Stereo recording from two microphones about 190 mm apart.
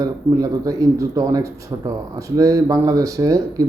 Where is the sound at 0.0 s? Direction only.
20° right (ahead or behind).